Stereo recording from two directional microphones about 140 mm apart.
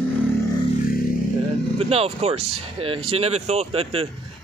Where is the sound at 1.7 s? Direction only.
45° right (ahead or behind).